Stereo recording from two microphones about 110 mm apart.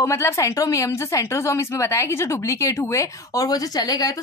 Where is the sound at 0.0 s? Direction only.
25° left (ahead or behind).